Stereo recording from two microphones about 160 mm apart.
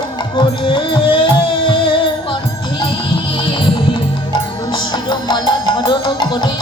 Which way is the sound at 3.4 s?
30° left (ahead or behind).